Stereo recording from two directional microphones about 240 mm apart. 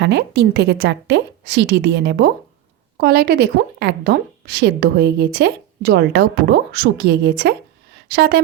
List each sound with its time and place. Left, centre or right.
0.0 s a woman's voice: right